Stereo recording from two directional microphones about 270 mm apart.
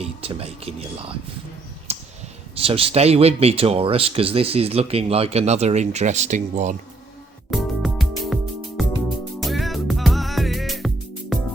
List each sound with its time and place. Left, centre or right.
0.0 s speech: right
1.9 s a sound: right
2.6 s speech: right
7.5 s music: centre
9.4 s music: centre